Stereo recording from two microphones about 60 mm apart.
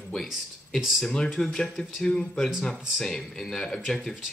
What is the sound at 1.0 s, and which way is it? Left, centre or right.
Speech, centre.